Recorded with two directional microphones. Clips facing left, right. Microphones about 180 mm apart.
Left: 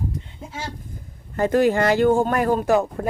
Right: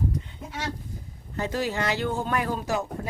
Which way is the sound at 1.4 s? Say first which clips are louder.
Left 10 dB; 55° left (ahead or behind).